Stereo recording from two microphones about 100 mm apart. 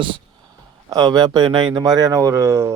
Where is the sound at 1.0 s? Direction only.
45° right (ahead or behind).